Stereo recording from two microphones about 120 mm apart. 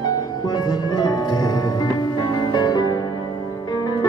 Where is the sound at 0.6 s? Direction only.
30° left (ahead or behind).